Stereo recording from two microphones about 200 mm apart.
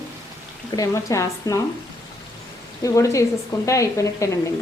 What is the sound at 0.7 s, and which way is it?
Speech, 15° left (ahead or behind).